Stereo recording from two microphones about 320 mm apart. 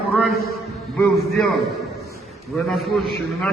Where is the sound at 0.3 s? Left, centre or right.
Left.